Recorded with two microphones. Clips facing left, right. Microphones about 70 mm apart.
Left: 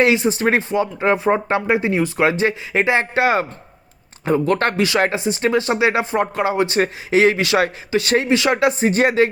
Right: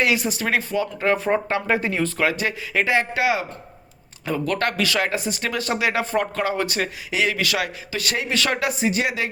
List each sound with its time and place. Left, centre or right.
0.0 s speech: left
6.7 s speech: left